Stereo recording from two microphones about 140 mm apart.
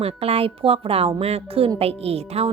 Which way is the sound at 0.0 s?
45° right (ahead or behind).